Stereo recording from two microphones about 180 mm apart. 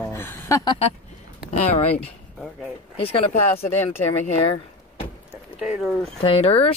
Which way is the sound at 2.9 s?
30° left (ahead or behind).